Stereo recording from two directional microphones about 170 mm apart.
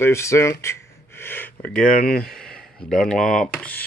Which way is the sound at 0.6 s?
15° left (ahead or behind).